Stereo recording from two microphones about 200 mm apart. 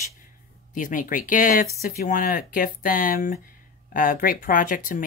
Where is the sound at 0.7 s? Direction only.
40° left (ahead or behind).